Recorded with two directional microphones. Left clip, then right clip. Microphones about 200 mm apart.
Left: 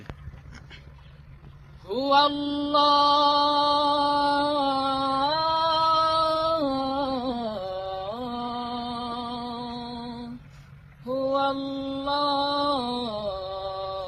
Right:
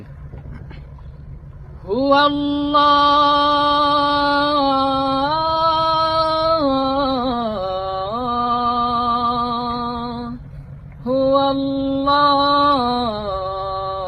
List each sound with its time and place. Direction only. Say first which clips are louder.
1.9 s mantra: right 6 dB; centre (ahead or behind)
4.1 s a sound: right 6 dB; 20° right (ahead or behind)
4.8 s music: right 7 dB; centre (ahead or behind)
5.2 s music: right 5 dB; 20° right (ahead or behind)
6.2 s a sound: right 7 dB; 20° right (ahead or behind)
7.3 s music: right 9 dB; 20° right (ahead or behind)
7.5 s music: right 9 dB; 5° left (ahead or behind)
11.3 s mantra: right 7 dB; centre (ahead or behind)
12.5 s music: right 10 dB; centre (ahead or behind)